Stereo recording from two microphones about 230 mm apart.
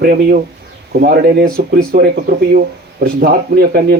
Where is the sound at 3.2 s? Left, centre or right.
Right.